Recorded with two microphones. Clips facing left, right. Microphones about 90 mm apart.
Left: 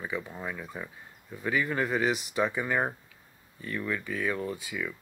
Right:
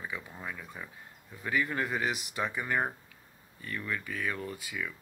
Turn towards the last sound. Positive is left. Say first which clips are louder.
# left 4 dB
turn(degrees=5)  # may be behind; listen again after turning